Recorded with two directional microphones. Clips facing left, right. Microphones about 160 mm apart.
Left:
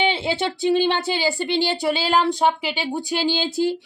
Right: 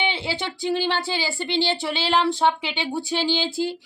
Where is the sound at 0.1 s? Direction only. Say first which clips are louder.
Left 5 dB; 20° left (ahead or behind).